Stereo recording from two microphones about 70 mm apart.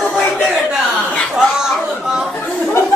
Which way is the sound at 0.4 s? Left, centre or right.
Centre.